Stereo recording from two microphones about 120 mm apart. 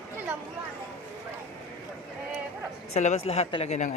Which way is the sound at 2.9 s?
70° left (ahead or behind).